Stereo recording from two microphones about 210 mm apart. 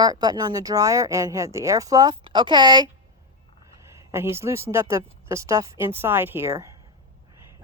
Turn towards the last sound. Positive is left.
turn(degrees=-15)  # may be behind; listen again after turning